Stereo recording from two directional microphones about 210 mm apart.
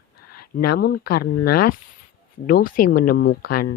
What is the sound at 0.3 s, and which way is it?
Speech, 45° left (ahead or behind).